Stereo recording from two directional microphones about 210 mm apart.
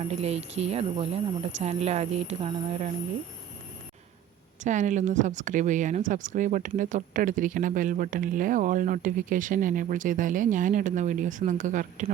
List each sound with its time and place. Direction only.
0.0 s speech: 30° right (ahead or behind)
4.6 s speech: 35° right (ahead or behind)